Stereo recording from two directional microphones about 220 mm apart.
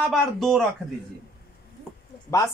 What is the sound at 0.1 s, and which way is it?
Speech, centre (ahead or behind).